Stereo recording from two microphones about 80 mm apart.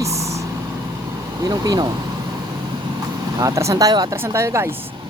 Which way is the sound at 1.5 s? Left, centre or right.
Right.